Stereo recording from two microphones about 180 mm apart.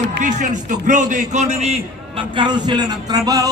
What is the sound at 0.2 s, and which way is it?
A man's voice, 45° right (ahead or behind).